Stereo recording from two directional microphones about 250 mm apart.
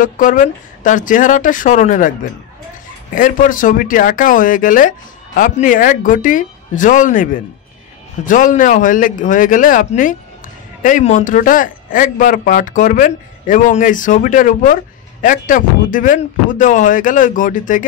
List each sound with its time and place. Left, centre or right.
0.0 s speech: left
3.2 s speech: left
8.3 s speech: left